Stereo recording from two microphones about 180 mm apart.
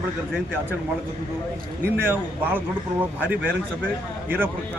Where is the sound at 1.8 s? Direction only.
10° right (ahead or behind).